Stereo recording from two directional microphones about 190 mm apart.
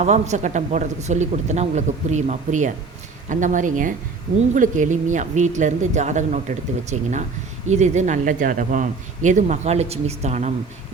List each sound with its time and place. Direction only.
0.0 s speech: 35° right (ahead or behind)